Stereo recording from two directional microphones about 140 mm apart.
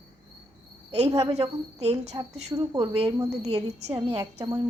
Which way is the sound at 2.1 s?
30° right (ahead or behind).